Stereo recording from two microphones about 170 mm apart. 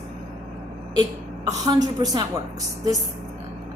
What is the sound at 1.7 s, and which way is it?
Speech, 20° right (ahead or behind).